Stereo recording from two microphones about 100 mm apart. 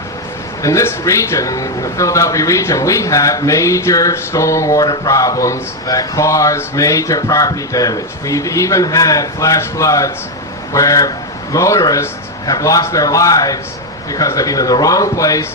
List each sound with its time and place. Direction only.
0.6 s a man's voice: 30° left (ahead or behind)